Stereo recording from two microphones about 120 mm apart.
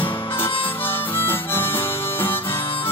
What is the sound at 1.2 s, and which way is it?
Harmonica, 20° left (ahead or behind).